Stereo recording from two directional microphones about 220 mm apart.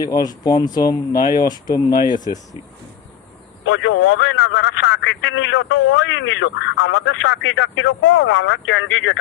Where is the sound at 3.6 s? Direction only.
65° left (ahead or behind).